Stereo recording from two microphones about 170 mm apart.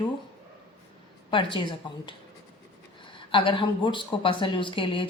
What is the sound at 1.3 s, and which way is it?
Speech, 30° left (ahead or behind).